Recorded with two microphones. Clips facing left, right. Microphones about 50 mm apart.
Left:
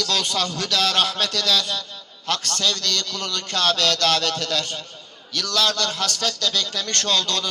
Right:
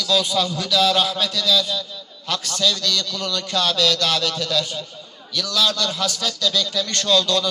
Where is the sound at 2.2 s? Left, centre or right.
Left.